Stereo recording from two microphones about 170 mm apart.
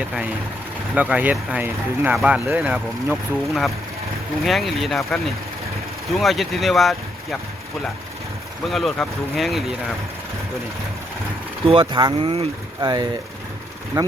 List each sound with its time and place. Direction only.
0.0 s speech: 5° right (ahead or behind)
8.6 s speech: centre (ahead or behind)
11.6 s speech: 30° right (ahead or behind)
14.0 s speech: 15° right (ahead or behind)